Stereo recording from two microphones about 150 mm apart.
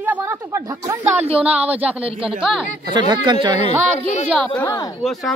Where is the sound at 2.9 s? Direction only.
30° right (ahead or behind).